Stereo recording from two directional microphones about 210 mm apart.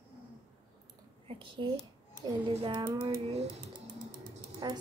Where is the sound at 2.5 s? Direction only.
25° right (ahead or behind).